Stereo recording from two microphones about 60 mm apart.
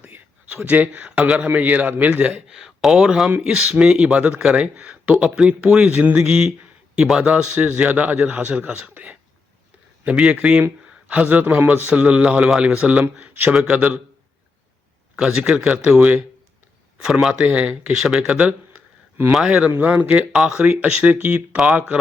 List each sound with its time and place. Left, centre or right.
0.0 s a sound: right
1.5 s a man's voice: right
2.5 s a man's voice: centre
15.1 s speech: centre
17.0 s speech: centre
17.3 s speech: right
19.8 s a man's voice: right